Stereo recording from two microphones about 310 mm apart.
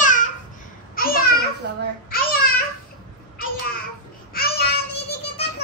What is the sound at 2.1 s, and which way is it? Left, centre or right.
Babbling, left.